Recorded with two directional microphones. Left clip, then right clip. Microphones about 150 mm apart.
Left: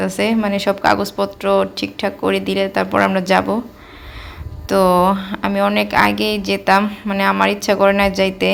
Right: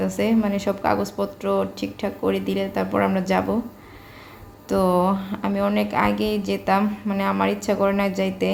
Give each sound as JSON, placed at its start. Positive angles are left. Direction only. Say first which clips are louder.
{"t": 0.0, "sound": "a woman's voice", "louder": "left 4 dB", "side_deg": 15}
{"t": 4.7, "sound": "speech", "louder": "left 7 dB", "side_deg": 15}